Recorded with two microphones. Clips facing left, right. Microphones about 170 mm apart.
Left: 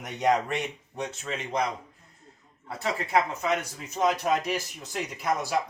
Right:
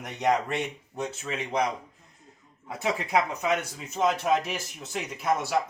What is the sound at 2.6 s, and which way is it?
Speech, 10° right (ahead or behind).